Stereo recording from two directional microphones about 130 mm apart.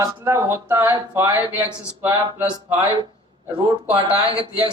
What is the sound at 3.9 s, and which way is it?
Speech, 40° right (ahead or behind).